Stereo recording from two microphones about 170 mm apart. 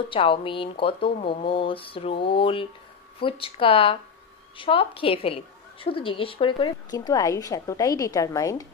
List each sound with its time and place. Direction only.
0.1 s a woman's voice: 30° left (ahead or behind)